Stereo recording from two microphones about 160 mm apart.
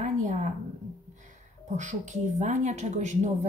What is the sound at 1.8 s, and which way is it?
A woman's voice, 50° right (ahead or behind).